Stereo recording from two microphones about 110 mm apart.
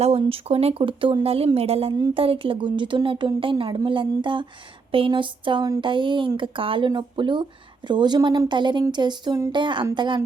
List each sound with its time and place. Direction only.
0.0 s a woman's voice: 65° right (ahead or behind); by 10.2 s 45° right (ahead or behind)